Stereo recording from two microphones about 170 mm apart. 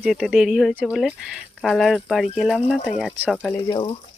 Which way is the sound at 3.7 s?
30° left (ahead or behind).